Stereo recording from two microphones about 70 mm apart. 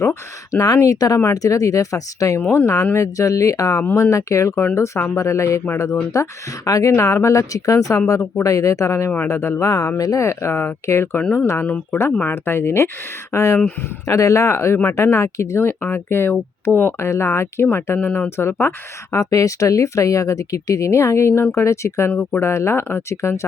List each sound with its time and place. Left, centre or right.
0.0 s speech: left
0.8 s speech: left
4.5 s speech: left
6.7 s speech: left
6.9 s speech: left
11.6 s speech: left
12.2 s speech: left
19.1 s speech: left
22.1 s speech: left
22.4 s speech: left